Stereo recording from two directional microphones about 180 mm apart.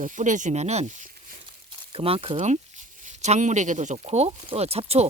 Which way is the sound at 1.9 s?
30° right (ahead or behind).